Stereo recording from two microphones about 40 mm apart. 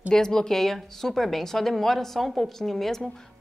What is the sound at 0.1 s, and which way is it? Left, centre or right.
A woman's voice, centre.